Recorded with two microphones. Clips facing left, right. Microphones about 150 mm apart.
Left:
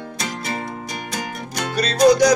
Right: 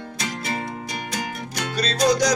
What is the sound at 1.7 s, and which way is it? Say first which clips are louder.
Music: left 6 dB; 60° left (ahead or behind).